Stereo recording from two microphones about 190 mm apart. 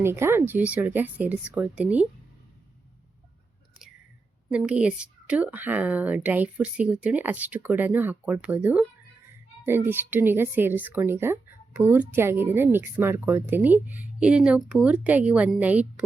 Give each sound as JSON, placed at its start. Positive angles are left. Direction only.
{"t": 0.0, "sound": "a woman's voice", "side_deg": -15}
{"t": 4.4, "sound": "a woman's voice", "side_deg": -5}